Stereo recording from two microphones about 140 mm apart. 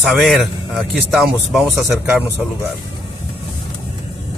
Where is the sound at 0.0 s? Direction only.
Centre (ahead or behind).